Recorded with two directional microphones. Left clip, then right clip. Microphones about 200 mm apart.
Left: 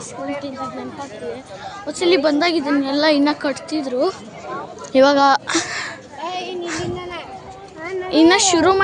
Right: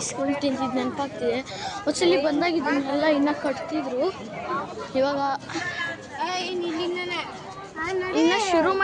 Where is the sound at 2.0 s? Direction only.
50° left (ahead or behind).